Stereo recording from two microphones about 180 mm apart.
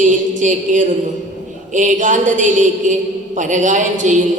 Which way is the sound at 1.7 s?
45° right (ahead or behind).